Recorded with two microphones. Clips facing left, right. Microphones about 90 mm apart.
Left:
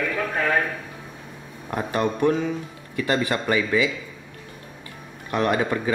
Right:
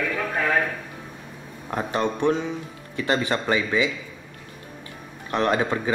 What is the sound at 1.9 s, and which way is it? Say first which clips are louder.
Speech: left 1 dB; 25° right (ahead or behind).